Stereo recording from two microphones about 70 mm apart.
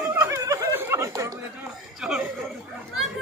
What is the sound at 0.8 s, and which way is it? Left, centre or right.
Chatter, right.